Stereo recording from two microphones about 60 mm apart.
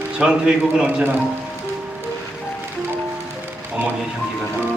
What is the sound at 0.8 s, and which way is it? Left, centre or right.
Speech, right.